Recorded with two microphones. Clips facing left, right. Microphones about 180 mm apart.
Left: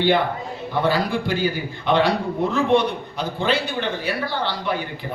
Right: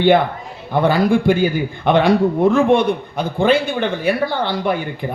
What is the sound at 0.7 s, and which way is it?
A man's voice, 50° right (ahead or behind).